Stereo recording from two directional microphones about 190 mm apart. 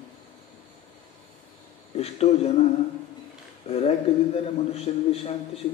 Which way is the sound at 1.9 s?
35° left (ahead or behind).